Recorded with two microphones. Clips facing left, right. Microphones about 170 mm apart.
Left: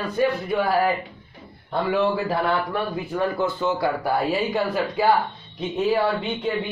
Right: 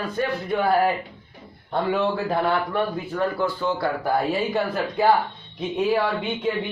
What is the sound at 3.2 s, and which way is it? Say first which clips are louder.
Speech: left 1 dB; 20° left (ahead or behind).